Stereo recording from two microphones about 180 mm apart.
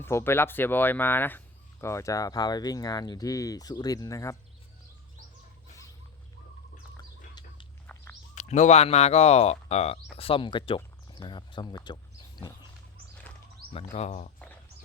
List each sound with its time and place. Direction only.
0.0 s speech: 15° left (ahead or behind)
7.9 s bird: 5° left (ahead or behind)
8.4 s speech: 40° left (ahead or behind); by 11.9 s 25° left (ahead or behind)
13.7 s speech: 35° left (ahead or behind)